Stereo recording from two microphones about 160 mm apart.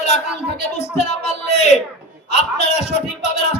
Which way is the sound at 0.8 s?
45° left (ahead or behind).